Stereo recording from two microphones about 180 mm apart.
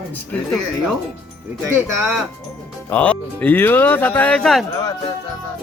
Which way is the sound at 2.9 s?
10° left (ahead or behind).